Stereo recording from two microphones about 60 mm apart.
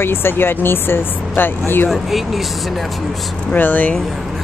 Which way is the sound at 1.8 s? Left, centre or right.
Centre.